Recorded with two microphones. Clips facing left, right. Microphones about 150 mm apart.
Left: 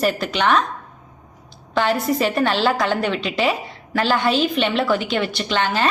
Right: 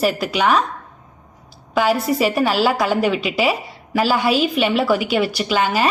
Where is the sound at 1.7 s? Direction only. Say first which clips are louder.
Right 2 dB; 5° right (ahead or behind).